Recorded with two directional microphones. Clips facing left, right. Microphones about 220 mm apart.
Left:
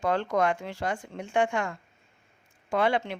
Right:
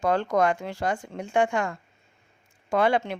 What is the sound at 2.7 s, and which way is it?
Speech, 45° right (ahead or behind).